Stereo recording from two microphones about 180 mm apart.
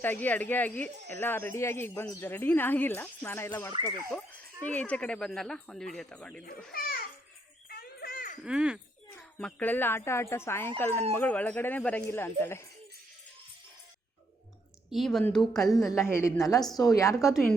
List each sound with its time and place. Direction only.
0.0 s speech: 10° left (ahead or behind)
6.7 s babbling: 55° left (ahead or behind)
7.7 s a sound: 55° left (ahead or behind)
8.4 s speech: 5° right (ahead or behind)
9.1 s speech: 10° left (ahead or behind)
14.8 s speech: centre (ahead or behind)
15.5 s a woman's voice: 20° left (ahead or behind)